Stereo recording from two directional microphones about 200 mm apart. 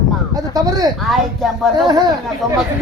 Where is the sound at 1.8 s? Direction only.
20° right (ahead or behind).